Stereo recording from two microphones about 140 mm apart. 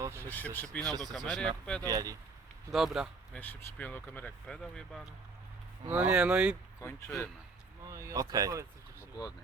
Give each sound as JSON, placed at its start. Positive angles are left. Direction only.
{"t": 0.0, "sound": "a sound", "side_deg": -20}
{"t": 0.3, "sound": "speech", "side_deg": 15}
{"t": 0.8, "sound": "speech", "side_deg": -30}
{"t": 1.1, "sound": "speech", "side_deg": 5}
{"t": 1.9, "sound": "speech", "side_deg": -25}
{"t": 2.7, "sound": "speech", "side_deg": -5}
{"t": 3.3, "sound": "speech", "side_deg": 10}
{"t": 5.9, "sound": "speech", "side_deg": -10}
{"t": 7.9, "sound": "speech", "side_deg": -20}
{"t": 9.0, "sound": "a sound", "side_deg": 25}